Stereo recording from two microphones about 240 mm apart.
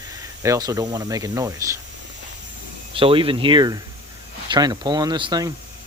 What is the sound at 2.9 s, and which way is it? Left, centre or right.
Speech, right.